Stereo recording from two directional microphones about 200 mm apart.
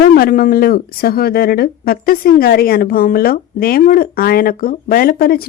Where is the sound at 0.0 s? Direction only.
50° left (ahead or behind).